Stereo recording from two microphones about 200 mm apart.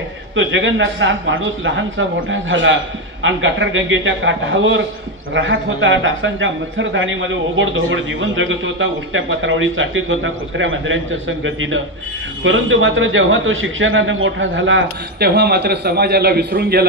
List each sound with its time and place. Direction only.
0.4 s a man's voice: 70° right (ahead or behind); by 16.8 s 50° right (ahead or behind)